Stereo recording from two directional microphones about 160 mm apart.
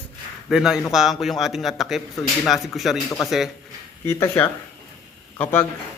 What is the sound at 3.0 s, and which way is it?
Speech, 20° left (ahead or behind).